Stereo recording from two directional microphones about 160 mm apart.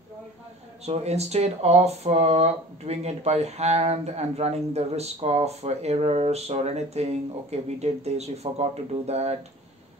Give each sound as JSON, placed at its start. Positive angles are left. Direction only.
{"t": 0.8, "sound": "speech", "side_deg": -40}